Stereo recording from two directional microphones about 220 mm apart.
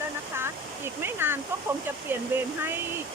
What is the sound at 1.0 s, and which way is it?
Speech, 10° right (ahead or behind).